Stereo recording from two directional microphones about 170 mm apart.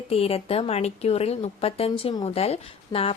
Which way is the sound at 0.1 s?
35° left (ahead or behind).